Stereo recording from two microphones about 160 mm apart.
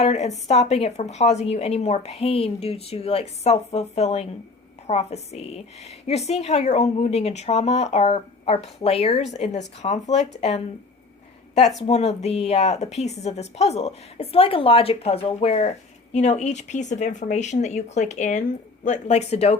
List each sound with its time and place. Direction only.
0.0 s a woman's voice: 45° left (ahead or behind)